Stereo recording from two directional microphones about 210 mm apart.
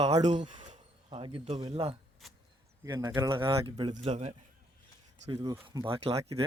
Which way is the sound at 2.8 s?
15° right (ahead or behind).